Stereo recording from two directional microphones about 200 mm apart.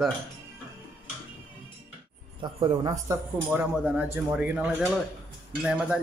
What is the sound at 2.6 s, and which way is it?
Speech, 20° right (ahead or behind).